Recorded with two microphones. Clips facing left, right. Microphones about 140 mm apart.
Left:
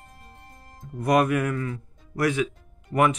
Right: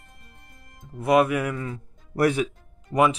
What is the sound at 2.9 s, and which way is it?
Speech, 15° right (ahead or behind).